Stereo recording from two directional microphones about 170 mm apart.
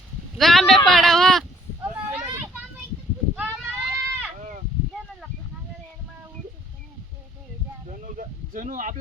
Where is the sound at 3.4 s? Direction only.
Centre (ahead or behind).